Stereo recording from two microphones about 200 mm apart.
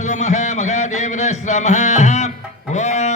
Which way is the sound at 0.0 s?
35° left (ahead or behind).